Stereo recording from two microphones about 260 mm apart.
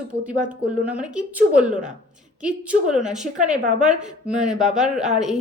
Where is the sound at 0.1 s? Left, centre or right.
Centre.